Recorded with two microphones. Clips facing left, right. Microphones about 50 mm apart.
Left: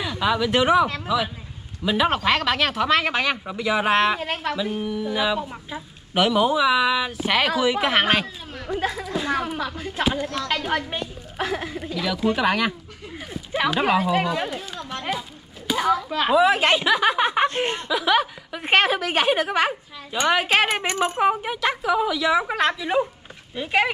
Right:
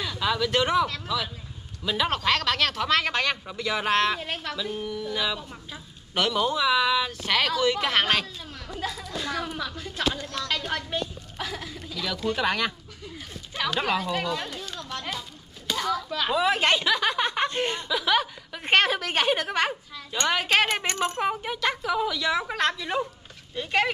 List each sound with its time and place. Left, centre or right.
0.0 s a woman's voice: centre
8.6 s speech: left
9.0 s a woman's voice: centre
16.3 s a woman's voice: centre